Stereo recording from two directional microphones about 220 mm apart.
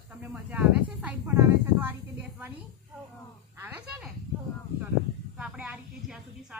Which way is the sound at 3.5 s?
10° right (ahead or behind).